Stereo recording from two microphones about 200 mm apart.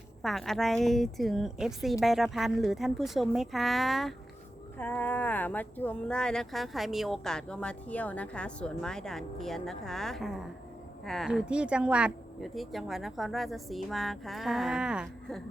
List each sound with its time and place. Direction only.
0.2 s speech: centre (ahead or behind)